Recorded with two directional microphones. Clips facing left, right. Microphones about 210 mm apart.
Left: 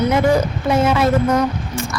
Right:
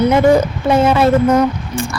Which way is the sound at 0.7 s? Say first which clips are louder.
Right 4 dB; 30° right (ahead or behind).